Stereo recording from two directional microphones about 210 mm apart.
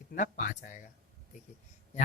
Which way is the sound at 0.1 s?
40° left (ahead or behind).